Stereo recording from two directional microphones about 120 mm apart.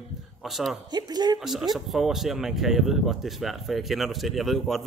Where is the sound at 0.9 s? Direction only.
35° right (ahead or behind).